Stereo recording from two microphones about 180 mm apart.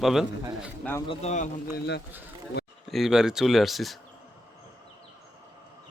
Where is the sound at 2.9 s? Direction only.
Centre (ahead or behind).